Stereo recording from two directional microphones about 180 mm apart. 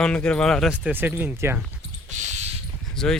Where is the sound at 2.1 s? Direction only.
40° right (ahead or behind).